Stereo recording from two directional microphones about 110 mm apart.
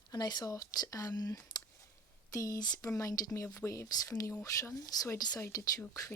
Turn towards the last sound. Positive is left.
turn(degrees=30)  # may be behind; listen again after turning